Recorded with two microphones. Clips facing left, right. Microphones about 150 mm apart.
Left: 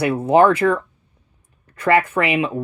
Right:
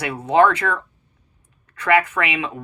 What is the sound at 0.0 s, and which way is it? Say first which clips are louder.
Speech: left 3 dB; 30° left (ahead or behind).